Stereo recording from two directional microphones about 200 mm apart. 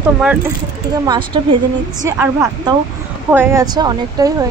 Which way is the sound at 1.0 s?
20° right (ahead or behind).